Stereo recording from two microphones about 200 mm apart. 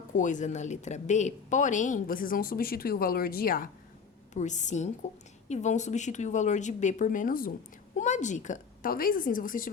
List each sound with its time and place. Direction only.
0.1 s a woman's voice: 40° left (ahead or behind)